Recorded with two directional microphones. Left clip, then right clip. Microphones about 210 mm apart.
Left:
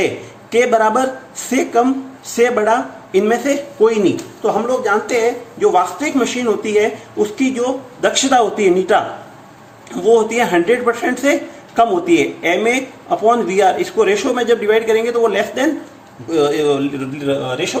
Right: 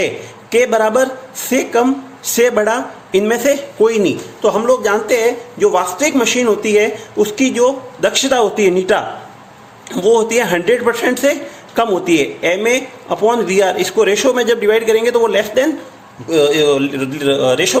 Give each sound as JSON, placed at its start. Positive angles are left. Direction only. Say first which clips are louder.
{"t": 0.5, "sound": "speech", "louder": "right 1 dB", "side_deg": -25}
{"t": 17.2, "sound": "a man's voice", "louder": "right 6 dB", "side_deg": -45}